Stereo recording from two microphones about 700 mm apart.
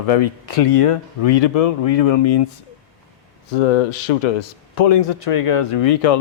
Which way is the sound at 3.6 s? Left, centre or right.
Left.